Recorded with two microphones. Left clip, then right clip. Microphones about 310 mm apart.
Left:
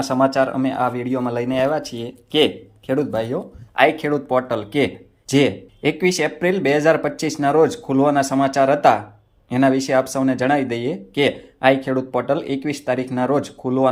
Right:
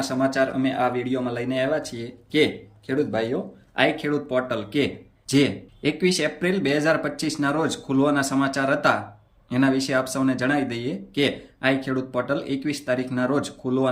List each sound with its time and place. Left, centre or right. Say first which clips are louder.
0.0 s speech: left 5 dB; centre
3.1 s speech: left 2 dB; left
3.8 s speech: left 6 dB; centre